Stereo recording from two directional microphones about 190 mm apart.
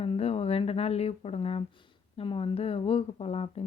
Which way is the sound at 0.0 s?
30° left (ahead or behind).